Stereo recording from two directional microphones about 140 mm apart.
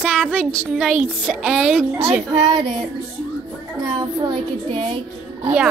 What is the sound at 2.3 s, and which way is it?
Speech, 35° right (ahead or behind).